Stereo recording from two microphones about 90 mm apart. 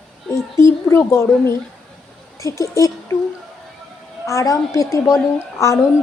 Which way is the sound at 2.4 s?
35° left (ahead or behind).